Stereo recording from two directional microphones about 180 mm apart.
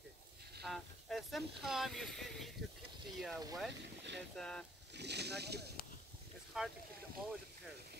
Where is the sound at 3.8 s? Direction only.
75° right (ahead or behind).